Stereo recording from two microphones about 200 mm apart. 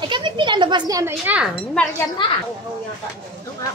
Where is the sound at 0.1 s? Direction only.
25° right (ahead or behind); by 1.5 s 10° right (ahead or behind).